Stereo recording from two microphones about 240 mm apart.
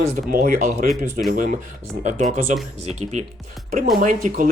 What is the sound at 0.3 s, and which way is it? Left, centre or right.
Speech, right.